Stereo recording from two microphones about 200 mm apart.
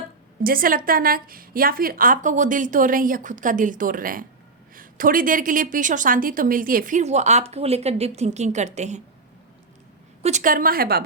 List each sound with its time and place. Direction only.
0.4 s a woman's voice: 45° right (ahead or behind)
10.2 s a woman's voice: 40° right (ahead or behind)